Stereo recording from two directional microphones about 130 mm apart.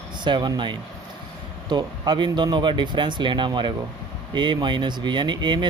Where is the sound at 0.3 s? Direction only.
35° right (ahead or behind).